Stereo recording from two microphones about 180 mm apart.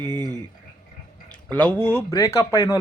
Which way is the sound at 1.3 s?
10° left (ahead or behind).